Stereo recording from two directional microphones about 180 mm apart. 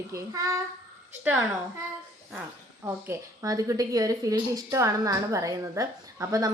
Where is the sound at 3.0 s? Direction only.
20° right (ahead or behind).